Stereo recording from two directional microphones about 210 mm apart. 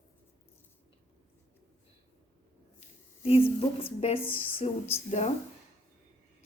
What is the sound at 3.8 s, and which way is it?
A woman's voice, 30° left (ahead or behind).